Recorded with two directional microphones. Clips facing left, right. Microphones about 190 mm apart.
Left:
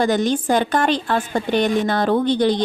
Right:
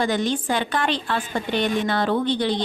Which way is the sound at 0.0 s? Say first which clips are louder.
Left 4 dB; 45° left (ahead or behind).